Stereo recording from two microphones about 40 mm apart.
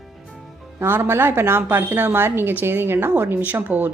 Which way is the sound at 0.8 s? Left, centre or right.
Right.